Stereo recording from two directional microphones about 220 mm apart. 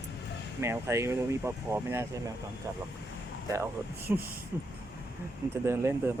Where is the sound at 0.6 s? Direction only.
10° right (ahead or behind).